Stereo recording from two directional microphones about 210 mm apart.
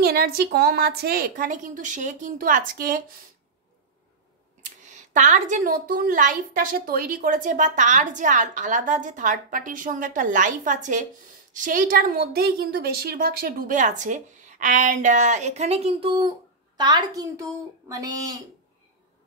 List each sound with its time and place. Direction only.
0.0 s a woman's voice: 50° right (ahead or behind)
5.1 s a woman's voice: 35° right (ahead or behind); by 18.4 s 15° right (ahead or behind)